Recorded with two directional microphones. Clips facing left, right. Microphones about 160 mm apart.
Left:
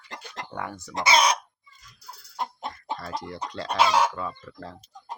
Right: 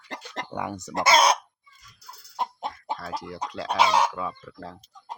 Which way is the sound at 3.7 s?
20° right (ahead or behind).